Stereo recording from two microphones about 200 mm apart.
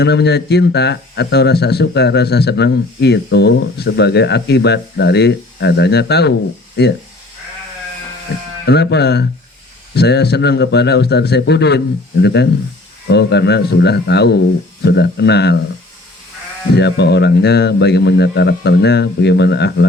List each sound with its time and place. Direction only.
0.0 s speech: 55° left (ahead or behind)
8.6 s speech: 55° left (ahead or behind)
16.7 s speech: 55° left (ahead or behind)